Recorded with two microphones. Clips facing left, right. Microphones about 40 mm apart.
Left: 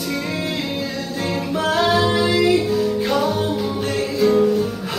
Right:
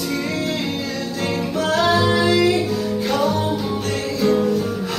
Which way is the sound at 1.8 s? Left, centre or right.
Centre.